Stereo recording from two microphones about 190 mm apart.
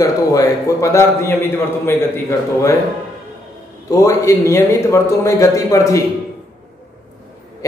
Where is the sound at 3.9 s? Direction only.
15° left (ahead or behind).